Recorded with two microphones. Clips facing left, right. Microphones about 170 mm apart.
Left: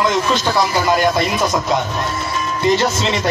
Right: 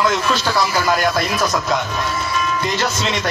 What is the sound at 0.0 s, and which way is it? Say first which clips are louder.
A man's voice: left 2 dB; 20° left (ahead or behind).